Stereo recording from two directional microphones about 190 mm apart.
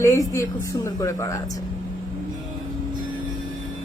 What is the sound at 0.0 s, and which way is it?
A woman's voice, 15° left (ahead or behind).